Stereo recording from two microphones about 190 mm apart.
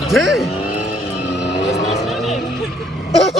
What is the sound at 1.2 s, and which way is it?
Music, 65° left (ahead or behind).